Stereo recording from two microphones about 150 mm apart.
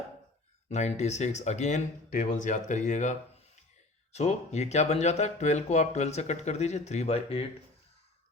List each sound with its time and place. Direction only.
0.7 s speech: 50° left (ahead or behind)